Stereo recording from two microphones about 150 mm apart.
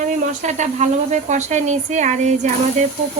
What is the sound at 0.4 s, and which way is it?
Speech, 50° right (ahead or behind).